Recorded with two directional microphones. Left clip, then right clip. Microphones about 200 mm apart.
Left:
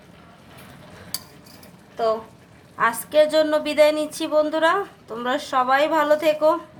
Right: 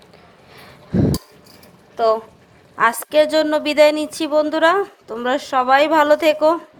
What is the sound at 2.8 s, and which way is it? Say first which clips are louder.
A woman's voice: right 3 dB; 35° right (ahead or behind).